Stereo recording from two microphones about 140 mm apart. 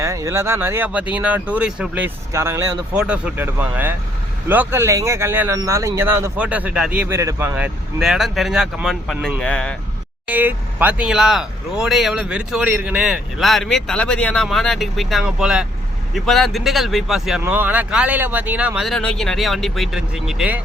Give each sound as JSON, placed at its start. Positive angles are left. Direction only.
{"t": 0.0, "sound": "speech", "side_deg": -20}
{"t": 2.9, "sound": "speech", "side_deg": -10}
{"t": 7.2, "sound": "speech", "side_deg": -20}
{"t": 7.5, "sound": "speech", "side_deg": -5}
{"t": 10.2, "sound": "speech", "side_deg": -10}
{"t": 17.4, "sound": "speech", "side_deg": -15}